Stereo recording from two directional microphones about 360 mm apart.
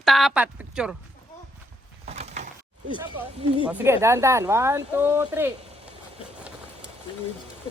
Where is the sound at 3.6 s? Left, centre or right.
Centre.